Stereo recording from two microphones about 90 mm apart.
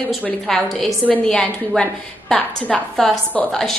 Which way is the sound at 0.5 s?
5° left (ahead or behind).